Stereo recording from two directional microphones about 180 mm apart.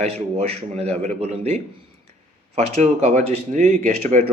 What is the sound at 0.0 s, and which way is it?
A man's voice, 40° right (ahead or behind).